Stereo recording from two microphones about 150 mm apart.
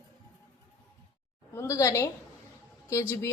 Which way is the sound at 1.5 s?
20° left (ahead or behind).